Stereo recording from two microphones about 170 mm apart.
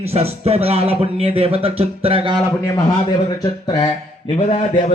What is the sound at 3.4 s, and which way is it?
Speech, 25° left (ahead or behind).